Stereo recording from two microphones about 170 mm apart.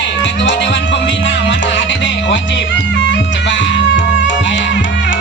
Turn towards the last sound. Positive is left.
turn(degrees=90)